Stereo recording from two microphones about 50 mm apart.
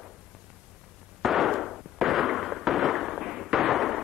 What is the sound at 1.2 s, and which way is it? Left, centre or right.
Fireworks, centre.